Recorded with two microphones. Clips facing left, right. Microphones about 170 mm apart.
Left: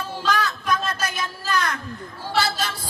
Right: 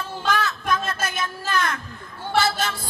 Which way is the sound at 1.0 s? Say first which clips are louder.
Even; 25° right (ahead or behind).